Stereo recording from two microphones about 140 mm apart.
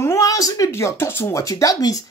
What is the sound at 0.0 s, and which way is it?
Speech, 20° left (ahead or behind).